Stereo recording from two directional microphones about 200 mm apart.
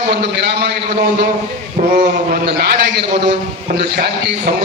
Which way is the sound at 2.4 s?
55° right (ahead or behind).